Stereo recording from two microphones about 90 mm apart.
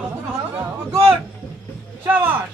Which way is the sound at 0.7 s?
30° right (ahead or behind).